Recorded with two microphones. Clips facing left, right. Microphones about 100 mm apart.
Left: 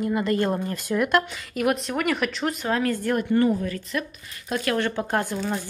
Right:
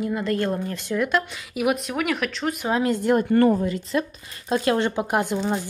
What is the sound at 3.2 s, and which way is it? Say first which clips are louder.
Speech: right 1 dB; 55° right (ahead or behind).